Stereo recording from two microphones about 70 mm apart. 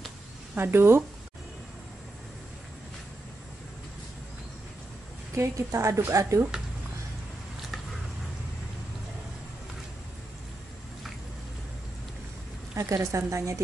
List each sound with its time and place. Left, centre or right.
0.6 s speech: right
5.3 s a woman's voice: right
12.7 s a woman's voice: right